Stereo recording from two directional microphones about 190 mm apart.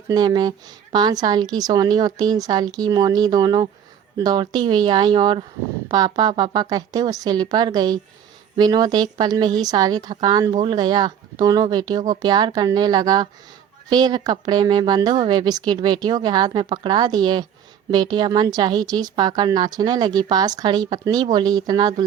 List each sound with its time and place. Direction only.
0.1 s a woman's voice: 20° right (ahead or behind)